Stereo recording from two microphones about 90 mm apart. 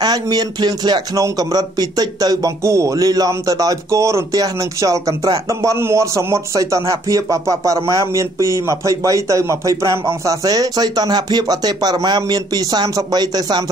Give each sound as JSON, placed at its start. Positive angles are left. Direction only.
{"t": 0.0, "sound": "speech", "side_deg": -45}
{"t": 1.1, "sound": "speech", "side_deg": -40}